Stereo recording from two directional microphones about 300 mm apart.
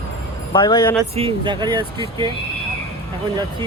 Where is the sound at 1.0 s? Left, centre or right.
Centre.